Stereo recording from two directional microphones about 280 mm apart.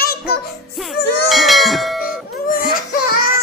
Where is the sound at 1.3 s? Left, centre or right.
Centre.